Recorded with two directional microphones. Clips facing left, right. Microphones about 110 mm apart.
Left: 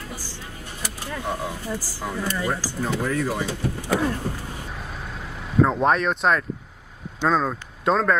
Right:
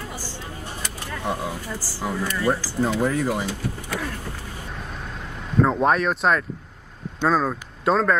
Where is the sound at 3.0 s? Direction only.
20° right (ahead or behind).